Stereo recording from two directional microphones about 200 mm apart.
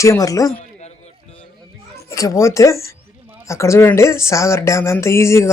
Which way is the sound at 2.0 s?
15° left (ahead or behind).